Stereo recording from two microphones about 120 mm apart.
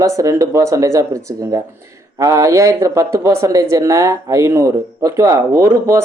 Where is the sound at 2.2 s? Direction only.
25° right (ahead or behind).